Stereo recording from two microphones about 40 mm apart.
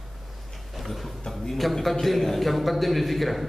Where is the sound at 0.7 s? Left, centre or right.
Centre.